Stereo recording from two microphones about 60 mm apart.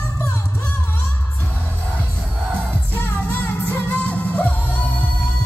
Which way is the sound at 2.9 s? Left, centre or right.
Left.